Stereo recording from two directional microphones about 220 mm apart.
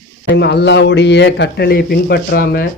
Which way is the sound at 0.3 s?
50° left (ahead or behind).